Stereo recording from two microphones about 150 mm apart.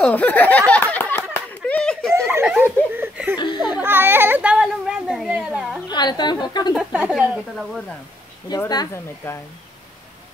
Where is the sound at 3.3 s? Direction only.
30° left (ahead or behind).